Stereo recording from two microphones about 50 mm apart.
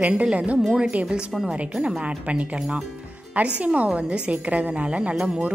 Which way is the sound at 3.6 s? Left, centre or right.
Right.